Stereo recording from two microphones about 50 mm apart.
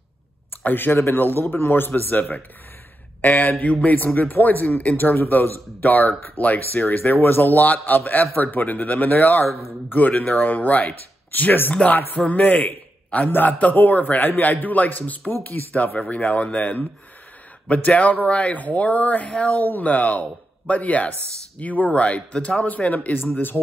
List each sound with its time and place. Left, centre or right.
0.7 s a man's voice: left
17.8 s speech: left